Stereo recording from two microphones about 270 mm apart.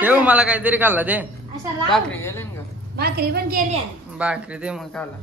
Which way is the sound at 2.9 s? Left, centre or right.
Right.